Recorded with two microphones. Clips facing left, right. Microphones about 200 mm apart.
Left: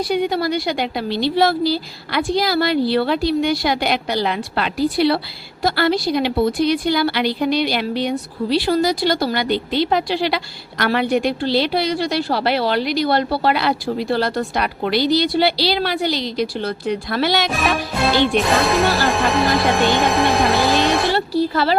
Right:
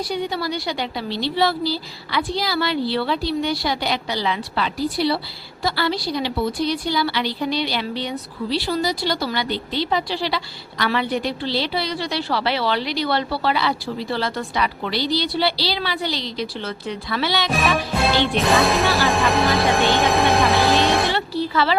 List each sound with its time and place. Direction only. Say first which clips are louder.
0.1 s a woman's voice: left 8 dB; 50° left (ahead or behind)
17.5 s speech: even; centre (ahead or behind)
18.6 s music: left 2 dB; centre (ahead or behind)
21.1 s speech: left 5 dB; 40° left (ahead or behind)